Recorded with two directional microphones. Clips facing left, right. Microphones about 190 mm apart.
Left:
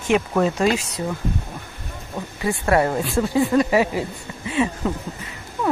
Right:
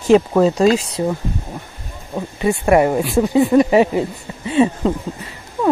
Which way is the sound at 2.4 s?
20° right (ahead or behind).